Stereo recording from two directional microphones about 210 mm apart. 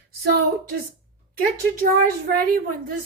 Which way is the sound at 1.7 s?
45° right (ahead or behind).